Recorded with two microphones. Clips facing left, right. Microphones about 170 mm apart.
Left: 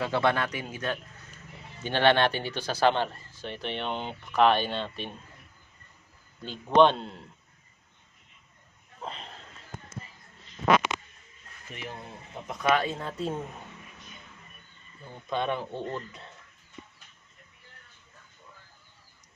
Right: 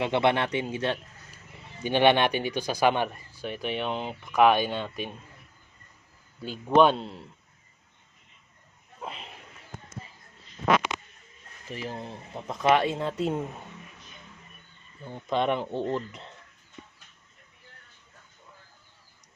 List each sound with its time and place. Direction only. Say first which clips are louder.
0.0 s speech: right 2 dB; 20° right (ahead or behind)
1.8 s speech: right 2 dB; 15° right (ahead or behind)
6.4 s a man's voice: even; 5° right (ahead or behind)
9.0 s a sound: even; 5° right (ahead or behind)
11.7 s speech: right 5 dB; 35° right (ahead or behind)
15.3 s speech: right 4 dB; 25° right (ahead or behind)